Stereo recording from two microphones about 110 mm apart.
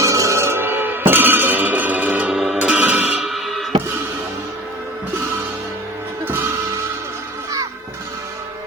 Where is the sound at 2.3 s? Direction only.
5° right (ahead or behind).